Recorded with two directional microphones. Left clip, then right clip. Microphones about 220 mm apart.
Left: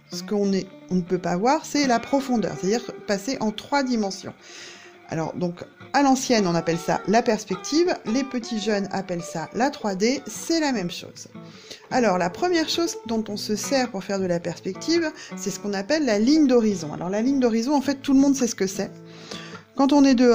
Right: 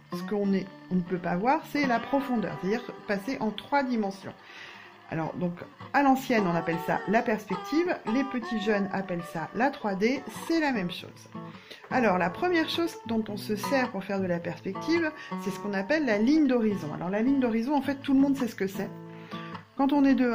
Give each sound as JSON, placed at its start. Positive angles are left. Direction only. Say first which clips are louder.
{"t": 0.2, "sound": "speech", "louder": "left 6 dB", "side_deg": 50}